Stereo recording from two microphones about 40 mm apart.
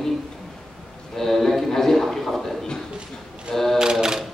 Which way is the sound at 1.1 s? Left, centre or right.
Centre.